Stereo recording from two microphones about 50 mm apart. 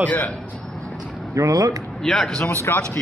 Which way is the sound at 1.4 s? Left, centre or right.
Right.